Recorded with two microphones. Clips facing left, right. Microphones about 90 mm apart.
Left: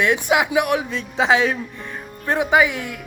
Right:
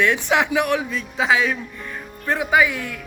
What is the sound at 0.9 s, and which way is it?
Speech, 30° left (ahead or behind).